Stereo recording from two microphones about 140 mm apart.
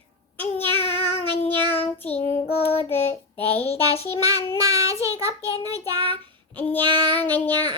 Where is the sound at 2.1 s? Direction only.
45° left (ahead or behind).